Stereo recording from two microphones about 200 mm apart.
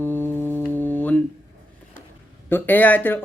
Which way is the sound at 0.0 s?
10° left (ahead or behind).